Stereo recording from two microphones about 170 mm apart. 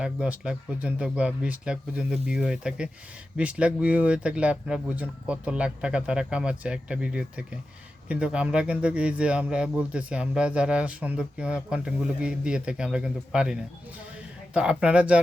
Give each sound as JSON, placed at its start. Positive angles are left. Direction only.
{"t": 0.0, "sound": "speech", "side_deg": -5}